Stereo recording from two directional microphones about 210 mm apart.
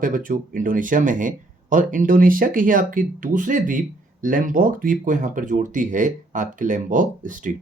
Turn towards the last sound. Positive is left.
turn(degrees=-40)  # may be behind; listen again after turning